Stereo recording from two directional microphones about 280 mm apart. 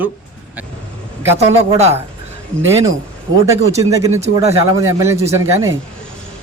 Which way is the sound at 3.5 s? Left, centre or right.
Centre.